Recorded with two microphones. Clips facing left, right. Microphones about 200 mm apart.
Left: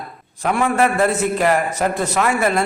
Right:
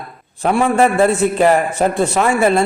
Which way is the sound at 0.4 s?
30° right (ahead or behind).